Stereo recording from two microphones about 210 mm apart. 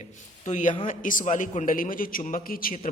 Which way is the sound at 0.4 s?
35° left (ahead or behind).